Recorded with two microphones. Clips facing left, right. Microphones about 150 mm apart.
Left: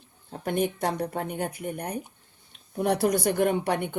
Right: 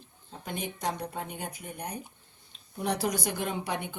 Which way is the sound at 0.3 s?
60° left (ahead or behind).